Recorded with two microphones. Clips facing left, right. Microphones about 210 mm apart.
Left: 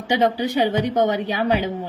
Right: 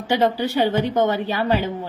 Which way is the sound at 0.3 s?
15° left (ahead or behind).